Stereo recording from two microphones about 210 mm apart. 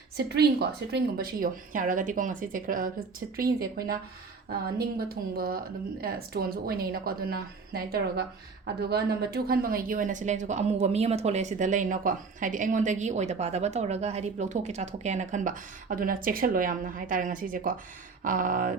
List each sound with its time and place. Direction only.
0.2 s a woman's voice: 50° right (ahead or behind)
4.8 s a woman's voice: 45° right (ahead or behind)